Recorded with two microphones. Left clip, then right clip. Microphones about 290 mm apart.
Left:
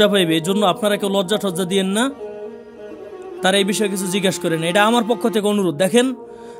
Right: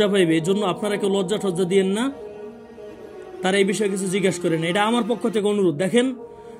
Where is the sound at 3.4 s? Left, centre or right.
Left.